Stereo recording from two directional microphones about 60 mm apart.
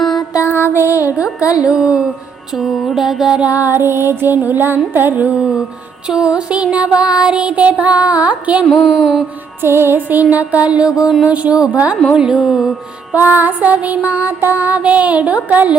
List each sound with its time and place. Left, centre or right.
0.0 s music: centre
0.8 s music: left
1.4 s speech: left
1.6 s music: centre
3.4 s music: right
3.7 s music: right
6.1 s music: centre
8.6 s speech: centre
8.9 s music: centre
9.6 s music: right; by 12.7 s centre
13.1 s music: right